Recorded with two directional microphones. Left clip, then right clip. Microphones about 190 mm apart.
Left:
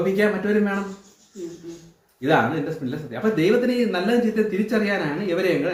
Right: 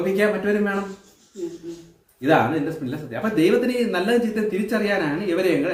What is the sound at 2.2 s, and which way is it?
Speech, 20° right (ahead or behind).